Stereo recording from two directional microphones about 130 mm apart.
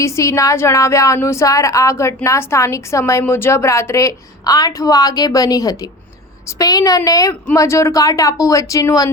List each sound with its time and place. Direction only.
0.0 s a woman's voice: 25° left (ahead or behind)